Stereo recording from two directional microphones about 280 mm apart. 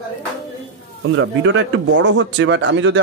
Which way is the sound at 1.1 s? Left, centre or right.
Right.